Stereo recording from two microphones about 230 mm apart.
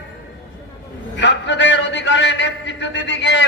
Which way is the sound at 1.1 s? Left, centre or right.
Left.